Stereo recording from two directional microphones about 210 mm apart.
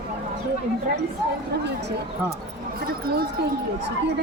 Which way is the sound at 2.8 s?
45° right (ahead or behind).